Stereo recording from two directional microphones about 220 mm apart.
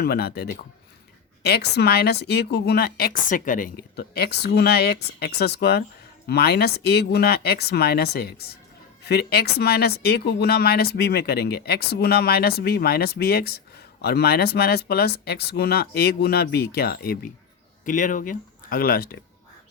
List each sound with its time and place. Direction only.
0.0 s speech: 45° left (ahead or behind)